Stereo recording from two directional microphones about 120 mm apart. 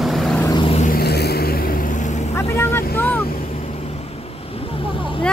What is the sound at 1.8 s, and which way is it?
Vehicle, 90° left.